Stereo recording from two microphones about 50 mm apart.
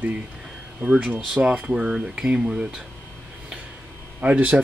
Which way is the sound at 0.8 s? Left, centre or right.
Right.